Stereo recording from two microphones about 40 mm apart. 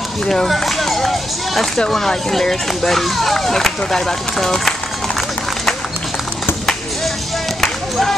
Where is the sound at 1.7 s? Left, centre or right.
Centre.